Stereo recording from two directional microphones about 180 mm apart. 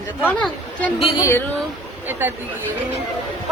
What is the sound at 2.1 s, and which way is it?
Speech, 10° right (ahead or behind).